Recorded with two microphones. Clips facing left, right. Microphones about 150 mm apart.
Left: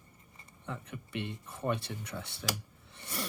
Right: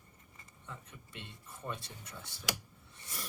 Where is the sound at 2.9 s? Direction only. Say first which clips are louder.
Left 9 dB; 65° left (ahead or behind).